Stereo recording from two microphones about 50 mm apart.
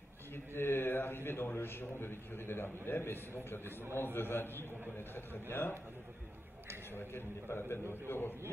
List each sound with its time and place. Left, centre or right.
0.6 s a man's voice: left
6.9 s a man's voice: left